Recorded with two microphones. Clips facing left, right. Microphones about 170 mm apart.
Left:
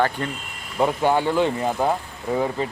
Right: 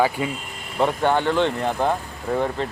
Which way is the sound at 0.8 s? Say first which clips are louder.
Even; 5° left (ahead or behind).